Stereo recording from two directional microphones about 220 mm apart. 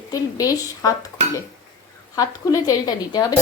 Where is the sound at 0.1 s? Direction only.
15° left (ahead or behind).